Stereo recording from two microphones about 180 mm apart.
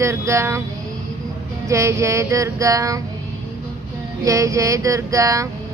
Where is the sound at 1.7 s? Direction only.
15° right (ahead or behind).